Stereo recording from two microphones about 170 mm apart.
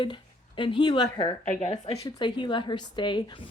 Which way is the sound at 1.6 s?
40° left (ahead or behind).